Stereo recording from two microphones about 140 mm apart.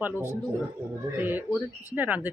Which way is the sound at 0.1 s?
20° left (ahead or behind).